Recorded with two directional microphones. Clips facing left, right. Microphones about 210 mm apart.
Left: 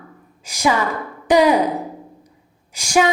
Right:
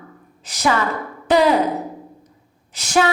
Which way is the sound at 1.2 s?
15° left (ahead or behind).